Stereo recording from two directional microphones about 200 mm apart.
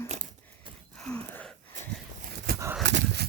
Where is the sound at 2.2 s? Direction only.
50° right (ahead or behind).